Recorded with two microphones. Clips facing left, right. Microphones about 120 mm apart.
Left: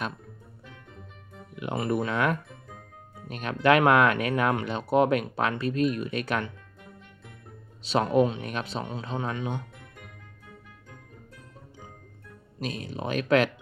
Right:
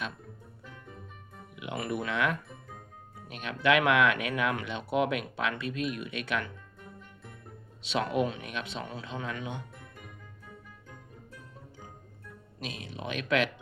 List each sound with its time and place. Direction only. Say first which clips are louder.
1.5 s music: left 6 dB; 45° left (ahead or behind)
1.9 s speech: left 4 dB; 40° left (ahead or behind)
7.8 s speech: left 6 dB; 40° left (ahead or behind)
8.8 s speech: left 4 dB; 25° left (ahead or behind)
9.0 s speech: left 7 dB; 40° left (ahead or behind)
12.5 s speech: left 7 dB; 40° left (ahead or behind)